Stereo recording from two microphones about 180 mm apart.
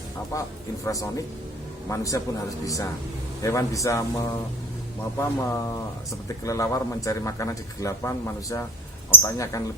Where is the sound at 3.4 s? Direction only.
15° left (ahead or behind).